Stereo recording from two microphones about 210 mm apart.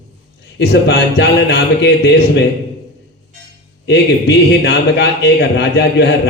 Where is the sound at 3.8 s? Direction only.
55° left (ahead or behind).